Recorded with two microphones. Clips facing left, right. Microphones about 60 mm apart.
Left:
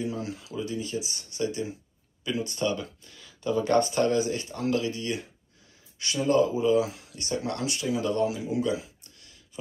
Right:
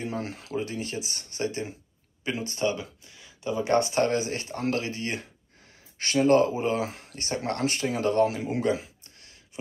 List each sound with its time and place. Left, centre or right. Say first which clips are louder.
0.0 s speech: left 1 dB; right
2.5 s speech: right 2 dB; right
2.8 s speech: left 1 dB; centre
3.9 s speech: left 1 dB; right